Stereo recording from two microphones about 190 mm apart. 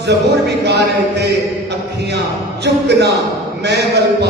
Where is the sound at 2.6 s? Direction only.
60° right (ahead or behind).